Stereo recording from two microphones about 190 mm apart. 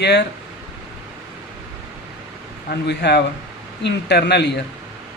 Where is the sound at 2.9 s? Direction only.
60° left (ahead or behind).